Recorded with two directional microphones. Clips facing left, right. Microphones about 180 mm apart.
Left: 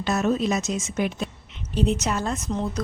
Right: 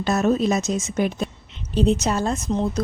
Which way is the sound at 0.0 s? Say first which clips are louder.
Right 3 dB; 40° right (ahead or behind).